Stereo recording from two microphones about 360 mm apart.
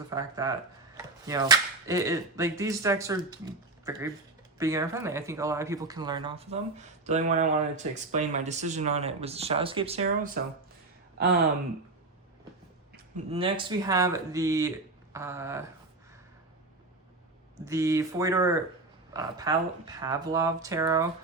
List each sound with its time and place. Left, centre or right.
0.1 s speech: centre
13.3 s speech: centre
17.7 s speech: centre